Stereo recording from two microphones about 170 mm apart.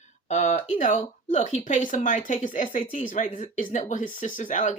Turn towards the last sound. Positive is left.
turn(degrees=45)  # may be behind; listen again after turning